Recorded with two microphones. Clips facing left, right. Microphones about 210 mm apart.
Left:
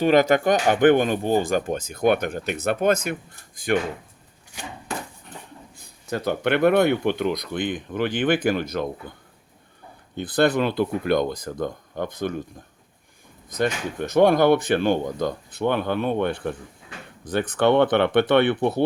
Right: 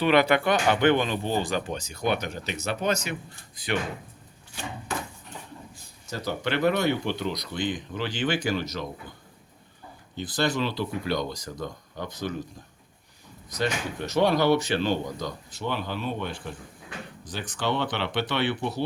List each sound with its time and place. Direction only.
0.0 s speech: 45° left (ahead or behind)
5.7 s speech: 60° left (ahead or behind)
10.2 s speech: 55° left (ahead or behind)
13.5 s speech: 50° left (ahead or behind)